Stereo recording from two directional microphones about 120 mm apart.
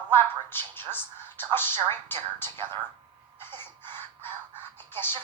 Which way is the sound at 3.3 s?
20° left (ahead or behind).